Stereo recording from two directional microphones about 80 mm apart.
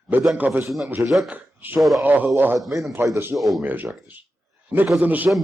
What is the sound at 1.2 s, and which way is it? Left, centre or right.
Speech, right.